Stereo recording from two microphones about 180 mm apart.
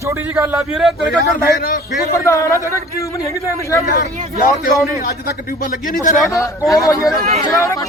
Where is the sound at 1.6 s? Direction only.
55° left (ahead or behind).